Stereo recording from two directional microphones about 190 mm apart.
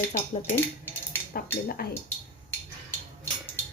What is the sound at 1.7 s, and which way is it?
Speech, 50° left (ahead or behind).